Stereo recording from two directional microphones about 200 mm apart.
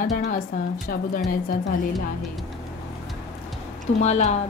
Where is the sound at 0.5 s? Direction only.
45° left (ahead or behind).